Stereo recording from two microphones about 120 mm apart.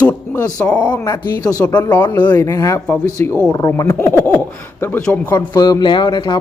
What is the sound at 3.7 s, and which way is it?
Speech, 20° left (ahead or behind).